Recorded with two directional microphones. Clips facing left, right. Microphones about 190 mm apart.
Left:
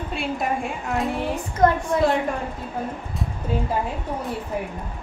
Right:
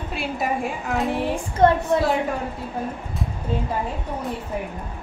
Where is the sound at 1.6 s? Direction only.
30° right (ahead or behind).